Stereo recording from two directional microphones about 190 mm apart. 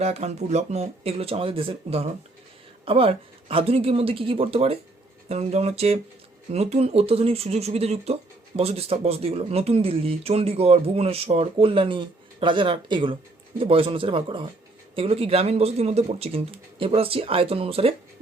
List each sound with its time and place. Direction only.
0.0 s speech: 35° right (ahead or behind)